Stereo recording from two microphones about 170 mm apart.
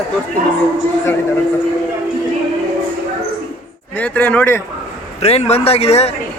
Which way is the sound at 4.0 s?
10° left (ahead or behind).